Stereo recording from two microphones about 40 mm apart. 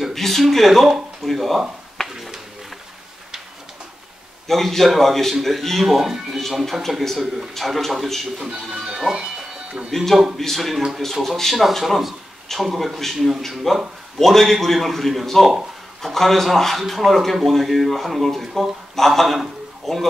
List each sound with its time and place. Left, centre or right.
0.1 s a man's voice: centre
4.5 s a man's voice: centre
8.5 s speech: centre
9.1 s music: right
9.8 s a man's voice: centre